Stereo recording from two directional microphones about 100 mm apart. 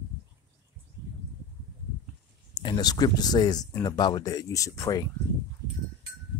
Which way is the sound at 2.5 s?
45° left (ahead or behind).